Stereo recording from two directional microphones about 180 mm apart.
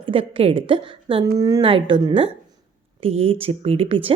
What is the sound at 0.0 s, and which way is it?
A woman's voice, 30° right (ahead or behind).